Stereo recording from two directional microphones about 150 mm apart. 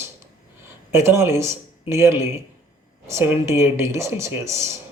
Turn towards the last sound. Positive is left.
turn(degrees=-20)  # may be behind; listen again after turning